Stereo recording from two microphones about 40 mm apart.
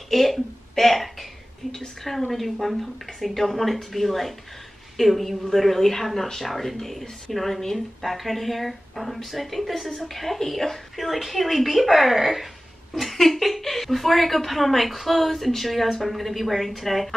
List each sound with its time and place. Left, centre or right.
0.1 s speech: centre
2.3 s speech: centre